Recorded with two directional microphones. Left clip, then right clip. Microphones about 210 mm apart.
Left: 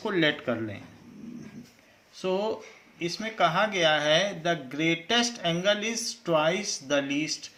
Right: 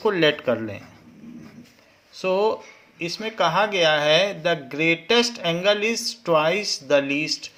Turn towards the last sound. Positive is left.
turn(degrees=-40)  # may be behind; listen again after turning